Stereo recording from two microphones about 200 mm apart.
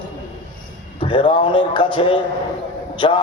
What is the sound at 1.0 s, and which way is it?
A man's voice, 25° left (ahead or behind).